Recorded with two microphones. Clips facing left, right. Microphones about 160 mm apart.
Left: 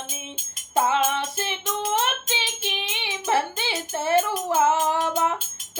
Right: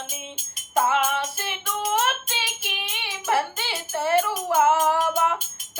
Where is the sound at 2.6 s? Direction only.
20° left (ahead or behind).